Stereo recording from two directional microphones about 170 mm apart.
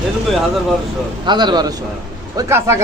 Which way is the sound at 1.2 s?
25° right (ahead or behind).